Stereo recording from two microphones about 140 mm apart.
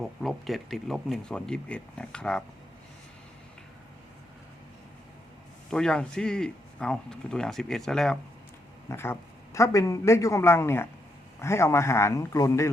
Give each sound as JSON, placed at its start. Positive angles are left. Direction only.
{"t": 0.0, "sound": "speech", "side_deg": 0}
{"t": 5.7, "sound": "speech", "side_deg": 5}
{"t": 8.9, "sound": "a man's voice", "side_deg": 20}